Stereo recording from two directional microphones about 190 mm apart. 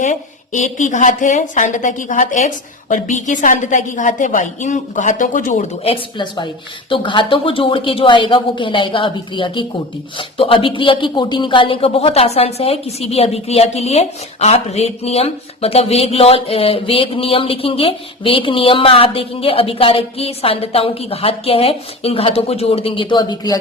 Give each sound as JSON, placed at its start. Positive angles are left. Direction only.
{"t": 0.0, "sound": "a woman's voice", "side_deg": 40}